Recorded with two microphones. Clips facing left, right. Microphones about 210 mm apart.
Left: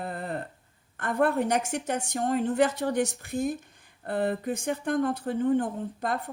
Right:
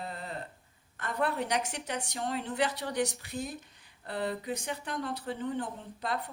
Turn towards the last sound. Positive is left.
turn(degrees=50)  # may be behind; listen again after turning